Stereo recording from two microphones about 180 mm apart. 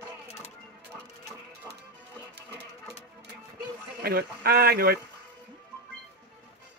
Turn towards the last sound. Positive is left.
turn(degrees=-60)  # may be behind; listen again after turning